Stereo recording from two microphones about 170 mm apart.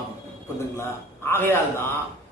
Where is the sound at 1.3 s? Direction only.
15° left (ahead or behind).